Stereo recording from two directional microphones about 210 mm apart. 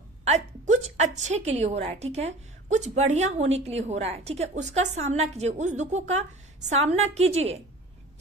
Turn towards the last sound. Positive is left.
turn(degrees=-30)  # may be behind; listen again after turning